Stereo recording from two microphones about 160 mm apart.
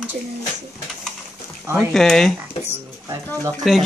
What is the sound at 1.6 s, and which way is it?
Speech, 15° right (ahead or behind).